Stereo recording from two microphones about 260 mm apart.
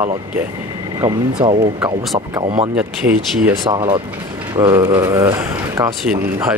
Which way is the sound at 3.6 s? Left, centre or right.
Centre.